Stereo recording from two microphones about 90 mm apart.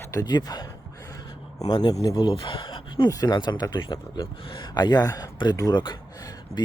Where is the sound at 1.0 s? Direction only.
40° left (ahead or behind).